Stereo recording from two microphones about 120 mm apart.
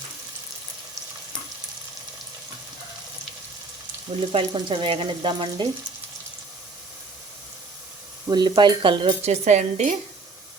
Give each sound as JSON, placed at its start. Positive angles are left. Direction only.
{"t": 4.3, "sound": "speech", "side_deg": -50}
{"t": 8.3, "sound": "speech", "side_deg": -35}
{"t": 9.0, "sound": "speech", "side_deg": -70}